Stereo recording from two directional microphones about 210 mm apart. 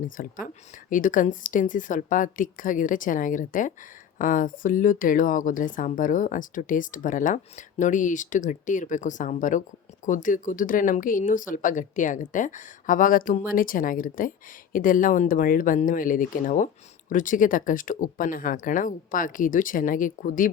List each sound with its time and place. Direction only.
0.2 s speech: 40° left (ahead or behind)